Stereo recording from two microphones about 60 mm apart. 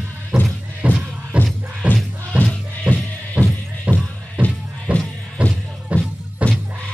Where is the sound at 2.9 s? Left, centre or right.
Right.